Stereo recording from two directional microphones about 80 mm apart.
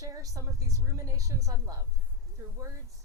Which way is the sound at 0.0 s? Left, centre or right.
Right.